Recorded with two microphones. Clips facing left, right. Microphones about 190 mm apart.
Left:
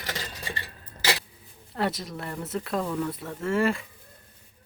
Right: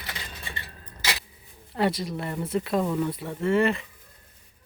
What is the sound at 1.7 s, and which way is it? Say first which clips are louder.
Speech: right 3 dB; centre (ahead or behind).